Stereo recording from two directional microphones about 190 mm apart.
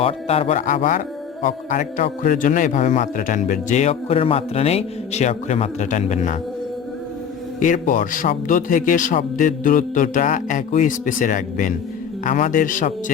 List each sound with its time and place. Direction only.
0.0 s a man's voice: 30° left (ahead or behind)
7.6 s a man's voice: 45° left (ahead or behind)